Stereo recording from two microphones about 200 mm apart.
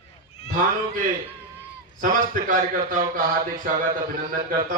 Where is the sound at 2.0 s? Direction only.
40° right (ahead or behind).